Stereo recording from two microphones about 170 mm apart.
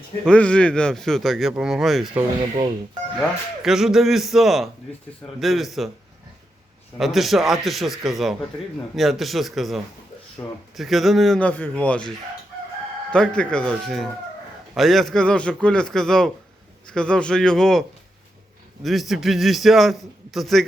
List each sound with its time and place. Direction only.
0.3 s speech: 5° left (ahead or behind)
2.4 s speech: 25° right (ahead or behind)
3.2 s speech: centre (ahead or behind)
7.0 s speech: centre (ahead or behind)
10.4 s speech: 15° left (ahead or behind)
10.8 s speech: centre (ahead or behind)